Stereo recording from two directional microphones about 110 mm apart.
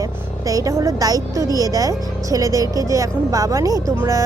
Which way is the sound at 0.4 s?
30° right (ahead or behind).